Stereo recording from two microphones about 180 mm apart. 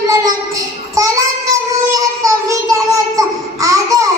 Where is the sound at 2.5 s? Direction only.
20° right (ahead or behind).